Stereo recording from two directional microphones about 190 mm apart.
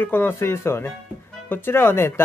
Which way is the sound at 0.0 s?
10° left (ahead or behind).